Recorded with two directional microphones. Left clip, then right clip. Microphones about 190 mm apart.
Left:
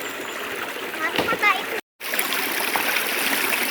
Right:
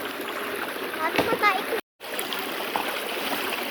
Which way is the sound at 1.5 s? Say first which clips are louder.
Left 3 dB; 25° right (ahead or behind).